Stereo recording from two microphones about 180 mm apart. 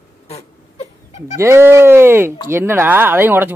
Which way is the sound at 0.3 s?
35° left (ahead or behind).